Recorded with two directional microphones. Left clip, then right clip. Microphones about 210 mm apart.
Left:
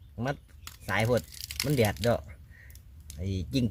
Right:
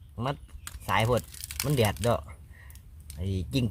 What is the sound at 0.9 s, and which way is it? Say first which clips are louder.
Speech: right 2 dB; 20° right (ahead or behind).